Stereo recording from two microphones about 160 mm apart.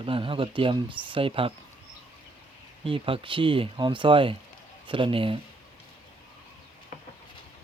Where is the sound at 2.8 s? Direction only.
35° right (ahead or behind).